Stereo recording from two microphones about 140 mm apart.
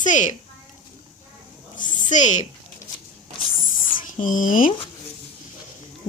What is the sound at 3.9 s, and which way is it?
Speech, 70° left (ahead or behind).